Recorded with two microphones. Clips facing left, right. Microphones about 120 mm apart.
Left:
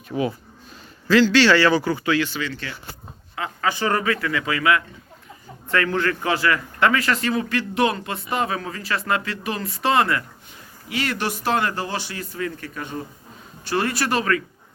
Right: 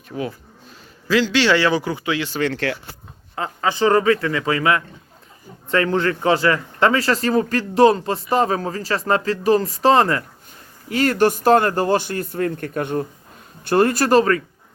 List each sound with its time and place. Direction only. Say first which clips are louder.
0.1 s speech: left 3 dB; 5° left (ahead or behind)
1.0 s a man's voice: left 2 dB; 10° right (ahead or behind)
2.4 s speech: right 9 dB; 85° right
3.3 s a man's voice: right 3 dB; 30° right (ahead or behind)